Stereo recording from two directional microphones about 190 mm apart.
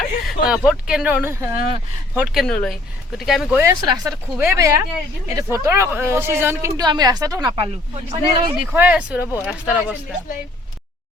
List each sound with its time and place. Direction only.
0.3 s speech: 5° right (ahead or behind)
3.6 s speech: 20° right (ahead or behind)
8.7 s speech: 5° right (ahead or behind)